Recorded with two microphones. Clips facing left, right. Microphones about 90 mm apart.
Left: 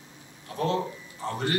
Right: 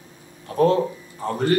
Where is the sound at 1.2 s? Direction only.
45° right (ahead or behind).